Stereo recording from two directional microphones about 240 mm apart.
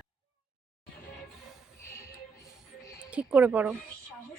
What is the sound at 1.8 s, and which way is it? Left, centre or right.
Music, centre.